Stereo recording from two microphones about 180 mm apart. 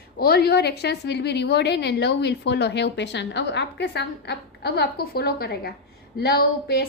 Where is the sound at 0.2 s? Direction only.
65° left (ahead or behind).